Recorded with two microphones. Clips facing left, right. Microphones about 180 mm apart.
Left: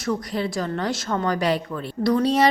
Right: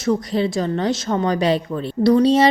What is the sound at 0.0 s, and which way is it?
A woman's voice, 25° right (ahead or behind).